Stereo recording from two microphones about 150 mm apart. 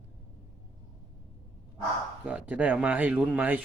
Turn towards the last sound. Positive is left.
turn(degrees=-10)  # may be behind; listen again after turning